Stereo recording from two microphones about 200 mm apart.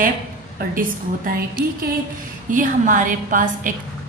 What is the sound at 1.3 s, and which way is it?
A woman's voice, 45° right (ahead or behind).